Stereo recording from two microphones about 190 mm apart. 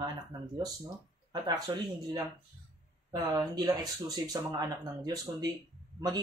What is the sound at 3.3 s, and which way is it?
Speech, 20° right (ahead or behind).